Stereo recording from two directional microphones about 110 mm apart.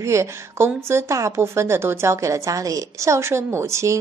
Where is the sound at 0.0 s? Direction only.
25° right (ahead or behind).